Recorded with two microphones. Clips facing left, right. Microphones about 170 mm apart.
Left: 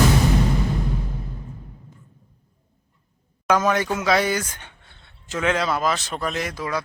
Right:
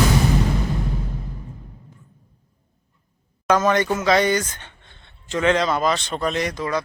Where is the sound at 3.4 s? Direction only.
10° left (ahead or behind).